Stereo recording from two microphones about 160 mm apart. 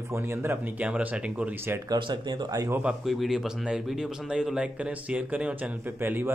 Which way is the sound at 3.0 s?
Centre (ahead or behind).